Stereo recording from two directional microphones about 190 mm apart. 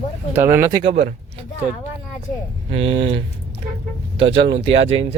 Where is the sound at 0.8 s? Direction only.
35° right (ahead or behind).